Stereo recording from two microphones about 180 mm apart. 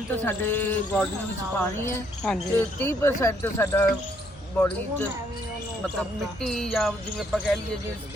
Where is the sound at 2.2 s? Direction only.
10° left (ahead or behind).